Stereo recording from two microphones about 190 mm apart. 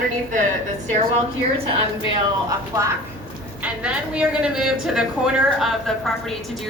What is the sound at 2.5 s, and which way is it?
Speech, 15° right (ahead or behind).